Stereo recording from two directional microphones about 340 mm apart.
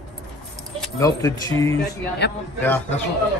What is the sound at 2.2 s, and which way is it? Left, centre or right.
Speech, left.